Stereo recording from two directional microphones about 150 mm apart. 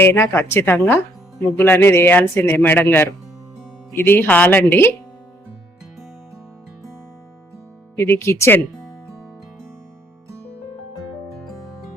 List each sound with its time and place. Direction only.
0.0 s a man's voice: 15° left (ahead or behind)
7.9 s a man's voice: 15° left (ahead or behind)